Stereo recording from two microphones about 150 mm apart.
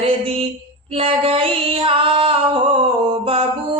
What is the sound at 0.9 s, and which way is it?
Female singing, 40° right (ahead or behind).